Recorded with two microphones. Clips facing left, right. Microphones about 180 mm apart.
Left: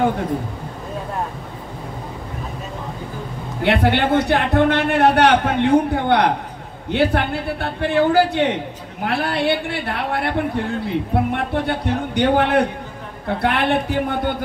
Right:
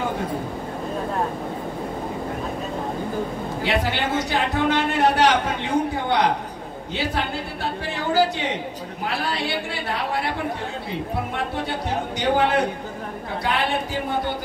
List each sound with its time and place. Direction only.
3.6 s a man's voice: 60° left (ahead or behind)